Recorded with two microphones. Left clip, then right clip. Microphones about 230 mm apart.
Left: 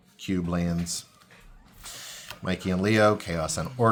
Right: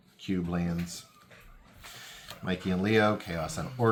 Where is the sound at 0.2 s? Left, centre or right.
Left.